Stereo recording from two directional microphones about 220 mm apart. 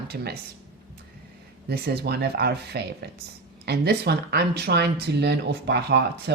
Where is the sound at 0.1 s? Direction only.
45° right (ahead or behind).